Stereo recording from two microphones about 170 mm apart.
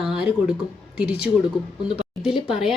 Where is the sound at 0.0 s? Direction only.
5° right (ahead or behind).